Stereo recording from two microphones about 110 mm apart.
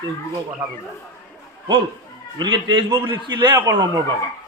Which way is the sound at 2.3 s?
40° right (ahead or behind).